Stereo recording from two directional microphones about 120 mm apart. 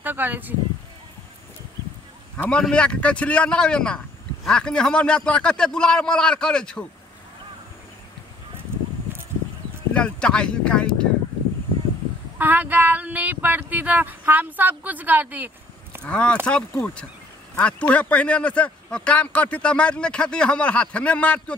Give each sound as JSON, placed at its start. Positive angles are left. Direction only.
{"t": 0.0, "sound": "speech", "side_deg": -15}
{"t": 2.5, "sound": "a man's voice", "side_deg": 10}
{"t": 9.9, "sound": "a man's voice", "side_deg": 10}
{"t": 12.4, "sound": "speech", "side_deg": -15}
{"t": 16.0, "sound": "a man's voice", "side_deg": 10}